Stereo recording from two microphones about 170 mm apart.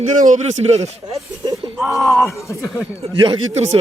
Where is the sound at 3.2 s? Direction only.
35° right (ahead or behind).